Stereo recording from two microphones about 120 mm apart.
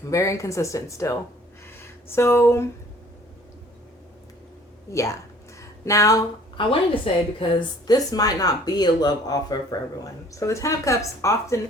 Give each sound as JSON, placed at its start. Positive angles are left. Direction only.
{"t": 0.1, "sound": "speech", "side_deg": 25}
{"t": 1.6, "sound": "a sound", "side_deg": 20}
{"t": 4.9, "sound": "speech", "side_deg": 25}
{"t": 5.5, "sound": "a sound", "side_deg": 25}
{"t": 6.6, "sound": "a woman's voice", "side_deg": 50}
{"t": 7.9, "sound": "speech", "side_deg": 30}